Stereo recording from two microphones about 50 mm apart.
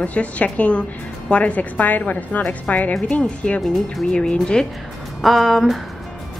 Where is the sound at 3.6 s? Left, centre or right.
Centre.